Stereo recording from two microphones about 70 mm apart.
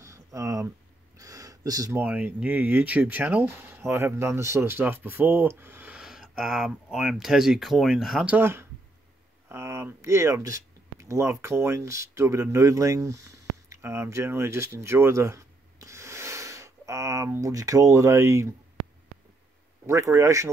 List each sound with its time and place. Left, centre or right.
0.0 s a sound: right
2.0 s speech: right
5.9 s speech: centre
8.3 s speech: right
19.9 s speech: right